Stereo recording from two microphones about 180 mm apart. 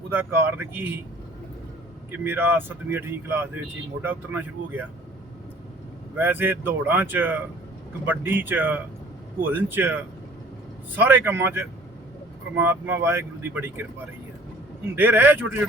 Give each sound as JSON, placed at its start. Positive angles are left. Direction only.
{"t": 0.1, "sound": "speech", "side_deg": -10}
{"t": 2.2, "sound": "speech", "side_deg": -10}
{"t": 6.1, "sound": "speech", "side_deg": -10}
{"t": 14.9, "sound": "speech", "side_deg": -10}